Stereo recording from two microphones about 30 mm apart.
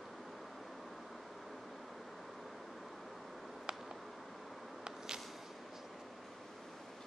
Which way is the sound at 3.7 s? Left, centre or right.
Right.